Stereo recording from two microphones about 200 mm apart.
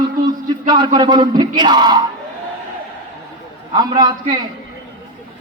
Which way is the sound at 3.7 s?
20° right (ahead or behind).